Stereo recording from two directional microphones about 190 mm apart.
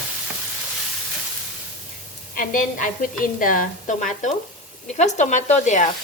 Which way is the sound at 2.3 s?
45° left (ahead or behind).